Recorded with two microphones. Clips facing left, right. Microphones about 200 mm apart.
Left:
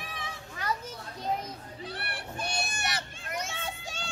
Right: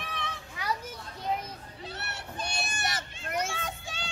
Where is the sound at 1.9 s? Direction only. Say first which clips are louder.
Left 1 dB; 25° right (ahead or behind).